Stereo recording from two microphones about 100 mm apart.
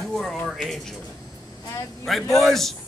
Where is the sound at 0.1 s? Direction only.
Centre (ahead or behind).